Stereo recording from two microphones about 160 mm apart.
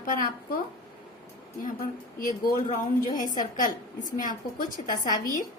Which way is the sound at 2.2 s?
60° left (ahead or behind).